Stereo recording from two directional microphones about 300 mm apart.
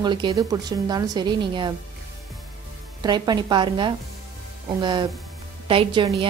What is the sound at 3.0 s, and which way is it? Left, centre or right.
Speech, centre.